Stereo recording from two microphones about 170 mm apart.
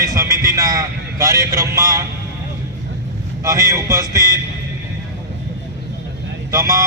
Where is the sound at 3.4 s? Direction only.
20° right (ahead or behind).